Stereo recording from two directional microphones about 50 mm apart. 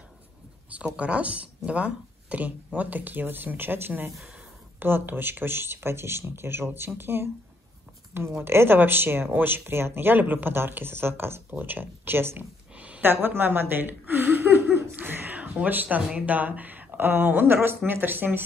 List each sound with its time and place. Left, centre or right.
0.7 s speech: right
8.4 s speech: right
11.5 s speech: right
12.7 s a sound: right
13.0 s chuckle: right
15.0 s a sound: right
16.3 s speech: right
17.6 s speech: right